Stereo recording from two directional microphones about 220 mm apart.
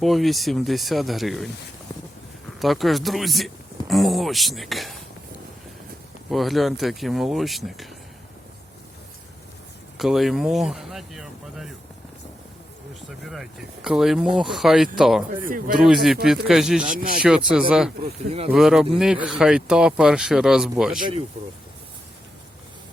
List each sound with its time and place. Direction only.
0.0 s speech: centre (ahead or behind)
2.6 s speech: centre (ahead or behind)
6.3 s speech: centre (ahead or behind)
10.0 s speech: centre (ahead or behind)
13.1 s speech: centre (ahead or behind)
15.4 s speech: 40° right (ahead or behind)
15.8 s speech: centre (ahead or behind)
16.8 s speech: 40° right (ahead or behind)
17.2 s speech: 5° right (ahead or behind)
18.0 s speech: 25° right (ahead or behind)
18.5 s speech: centre (ahead or behind)